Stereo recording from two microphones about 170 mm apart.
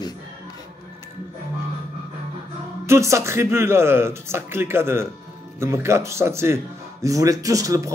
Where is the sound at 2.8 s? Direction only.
15° right (ahead or behind).